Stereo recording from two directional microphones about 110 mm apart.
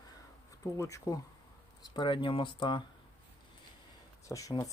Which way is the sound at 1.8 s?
45° left (ahead or behind).